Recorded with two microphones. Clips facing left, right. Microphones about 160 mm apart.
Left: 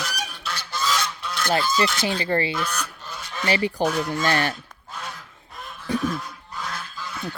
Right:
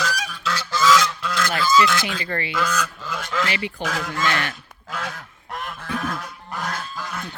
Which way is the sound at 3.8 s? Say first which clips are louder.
Left 3 dB; 90° right.